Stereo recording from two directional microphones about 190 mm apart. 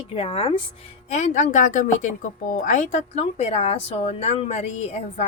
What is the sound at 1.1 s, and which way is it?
A woman's voice, 40° left (ahead or behind).